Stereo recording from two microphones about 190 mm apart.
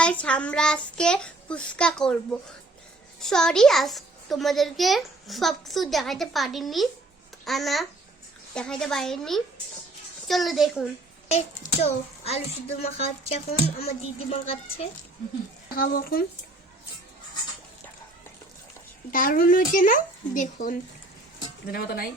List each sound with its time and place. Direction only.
0.0 s a child's voice: 5° left (ahead or behind)
11.7 s a child's voice: 35° left (ahead or behind)
15.7 s speech: 50° left (ahead or behind)
19.1 s speech: 45° left (ahead or behind)